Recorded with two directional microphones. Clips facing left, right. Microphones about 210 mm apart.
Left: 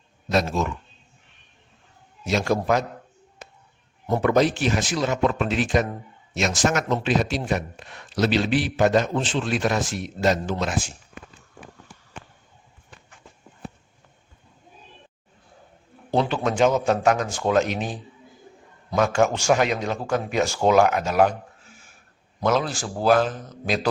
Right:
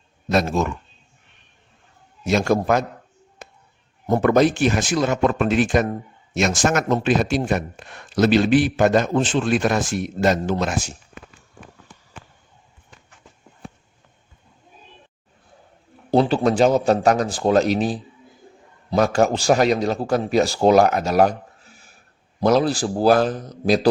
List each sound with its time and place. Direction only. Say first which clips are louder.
0.3 s speech: right 3 dB; 50° right (ahead or behind)
2.2 s speech: right 4 dB; 50° right (ahead or behind)
4.1 s speech: right 3 dB; 50° right (ahead or behind)
16.1 s a man's voice: right 5 dB; 35° right (ahead or behind)